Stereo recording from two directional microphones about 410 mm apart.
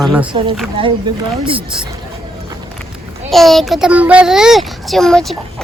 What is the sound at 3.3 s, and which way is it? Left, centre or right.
A child's voice, centre.